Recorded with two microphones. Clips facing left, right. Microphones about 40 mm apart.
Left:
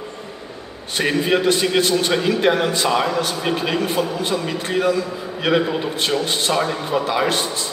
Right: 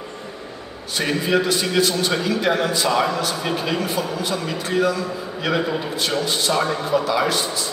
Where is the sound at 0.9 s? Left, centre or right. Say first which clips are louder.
Left 2 dB; left.